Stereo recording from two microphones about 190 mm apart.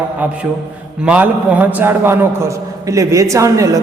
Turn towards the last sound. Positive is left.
turn(degrees=-15)  # may be behind; listen again after turning